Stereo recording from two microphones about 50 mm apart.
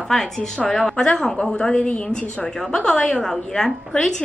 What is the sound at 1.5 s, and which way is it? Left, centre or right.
Speech, centre.